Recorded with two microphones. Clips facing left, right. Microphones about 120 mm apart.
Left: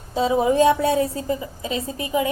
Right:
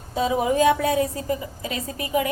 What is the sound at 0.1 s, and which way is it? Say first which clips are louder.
A woman's voice: left 3 dB; 25° left (ahead or behind).